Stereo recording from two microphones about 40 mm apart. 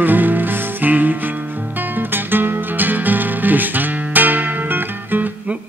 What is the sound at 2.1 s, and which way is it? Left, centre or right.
Music, right.